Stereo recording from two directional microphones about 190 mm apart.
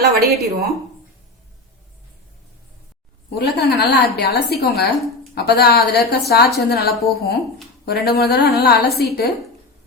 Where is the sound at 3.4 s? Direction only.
60° left (ahead or behind).